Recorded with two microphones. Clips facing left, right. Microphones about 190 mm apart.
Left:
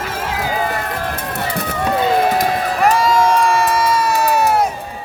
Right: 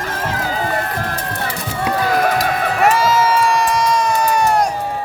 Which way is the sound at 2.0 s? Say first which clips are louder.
Left 2 dB; 25° left (ahead or behind).